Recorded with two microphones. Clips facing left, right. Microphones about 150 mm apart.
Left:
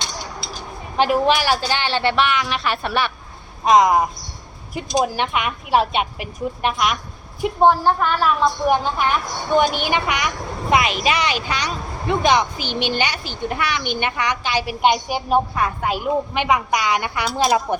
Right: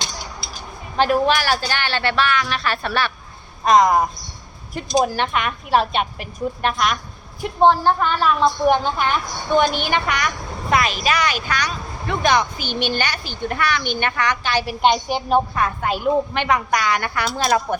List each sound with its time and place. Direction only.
0.9 s a woman's voice: 10° left (ahead or behind)